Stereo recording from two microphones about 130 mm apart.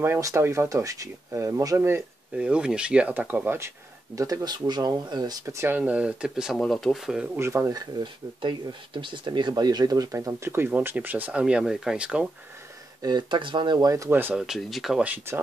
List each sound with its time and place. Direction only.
0.0 s speech: 20° right (ahead or behind)
2.3 s speech: 5° right (ahead or behind)
7.3 s speech: 20° right (ahead or behind)
13.0 s speech: 35° right (ahead or behind); by 14.4 s 15° right (ahead or behind)
14.4 s speech: centre (ahead or behind)